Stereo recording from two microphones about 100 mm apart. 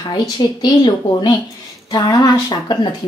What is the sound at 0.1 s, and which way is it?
Speech, 45° left (ahead or behind).